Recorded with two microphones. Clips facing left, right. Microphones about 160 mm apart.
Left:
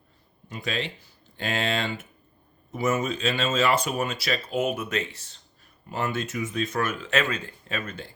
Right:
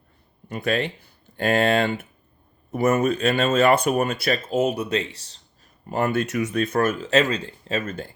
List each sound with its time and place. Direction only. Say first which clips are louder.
0.4 s speech: right 7 dB; 55° right (ahead or behind); by 5.4 s 35° right (ahead or behind)
5.9 s speech: right 6 dB; 55° right (ahead or behind); by 7.8 s 30° right (ahead or behind)
7.8 s speech: right 6 dB; 45° right (ahead or behind)